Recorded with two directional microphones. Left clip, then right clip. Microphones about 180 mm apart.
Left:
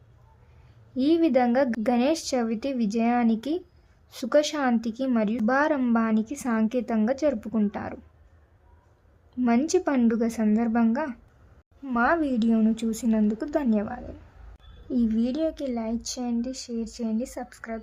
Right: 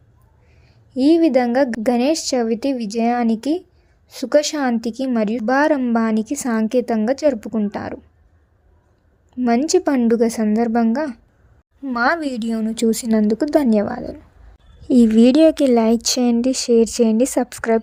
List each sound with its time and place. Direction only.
0.9 s a woman's voice: 20° right (ahead or behind)
9.6 s a woman's voice: 20° right (ahead or behind)
14.8 s speech: 45° right (ahead or behind)